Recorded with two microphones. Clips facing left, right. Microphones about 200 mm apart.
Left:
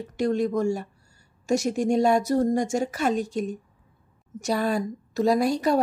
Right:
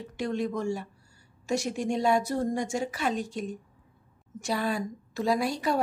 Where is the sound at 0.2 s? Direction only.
40° left (ahead or behind).